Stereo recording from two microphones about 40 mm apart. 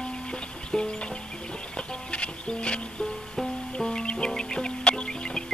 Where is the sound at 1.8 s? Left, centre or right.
Left.